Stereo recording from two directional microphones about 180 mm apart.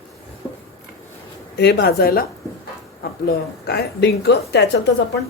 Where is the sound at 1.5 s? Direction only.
65° left (ahead or behind).